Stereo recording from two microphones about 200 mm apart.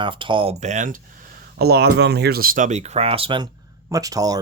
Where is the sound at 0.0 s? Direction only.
25° right (ahead or behind).